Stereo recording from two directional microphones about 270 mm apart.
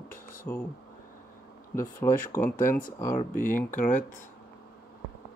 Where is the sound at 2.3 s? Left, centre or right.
Centre.